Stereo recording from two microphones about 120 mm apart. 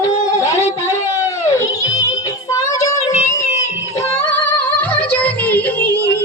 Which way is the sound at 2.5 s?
30° left (ahead or behind).